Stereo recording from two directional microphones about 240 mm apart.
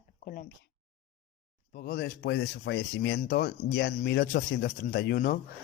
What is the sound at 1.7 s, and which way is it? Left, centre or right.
Speech, left.